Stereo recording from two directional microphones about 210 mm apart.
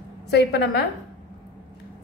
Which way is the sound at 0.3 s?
55° left (ahead or behind).